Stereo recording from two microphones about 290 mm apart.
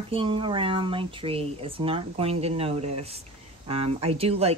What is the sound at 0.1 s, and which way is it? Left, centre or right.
Speech, centre.